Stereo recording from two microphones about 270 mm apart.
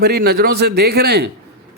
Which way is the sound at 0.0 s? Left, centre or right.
Right.